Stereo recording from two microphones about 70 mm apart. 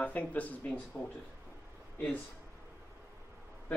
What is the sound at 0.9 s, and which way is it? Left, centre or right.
Speech, left.